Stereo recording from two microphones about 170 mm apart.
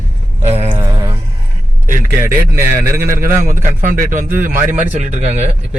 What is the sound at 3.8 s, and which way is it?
Speech, 50° right (ahead or behind).